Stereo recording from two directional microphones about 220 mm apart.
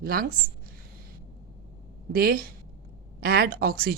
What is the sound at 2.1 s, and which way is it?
A woman's voice, 40° right (ahead or behind).